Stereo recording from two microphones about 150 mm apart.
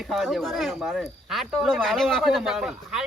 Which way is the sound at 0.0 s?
Centre (ahead or behind).